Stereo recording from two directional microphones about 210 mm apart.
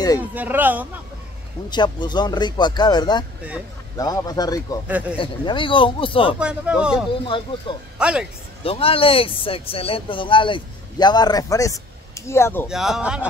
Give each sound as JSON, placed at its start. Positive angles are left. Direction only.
{"t": 0.2, "sound": "speech", "side_deg": -10}
{"t": 1.7, "sound": "speech", "side_deg": 20}
{"t": 6.4, "sound": "speech", "side_deg": -5}
{"t": 7.2, "sound": "speech", "side_deg": 25}
{"t": 8.0, "sound": "speech", "side_deg": -5}
{"t": 8.6, "sound": "speech", "side_deg": 25}
{"t": 12.6, "sound": "speech", "side_deg": 0}